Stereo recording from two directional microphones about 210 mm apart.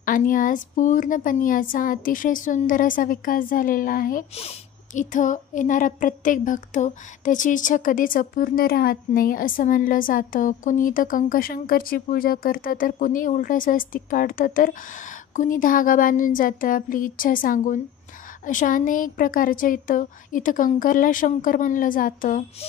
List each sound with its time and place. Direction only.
0.0 s speech: 40° left (ahead or behind)